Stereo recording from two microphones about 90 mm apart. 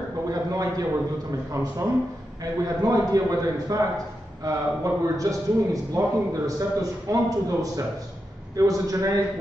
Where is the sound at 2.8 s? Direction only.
40° right (ahead or behind).